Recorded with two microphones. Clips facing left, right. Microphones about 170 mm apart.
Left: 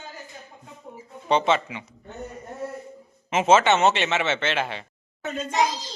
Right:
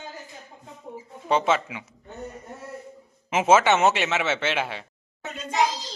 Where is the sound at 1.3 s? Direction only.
5° right (ahead or behind).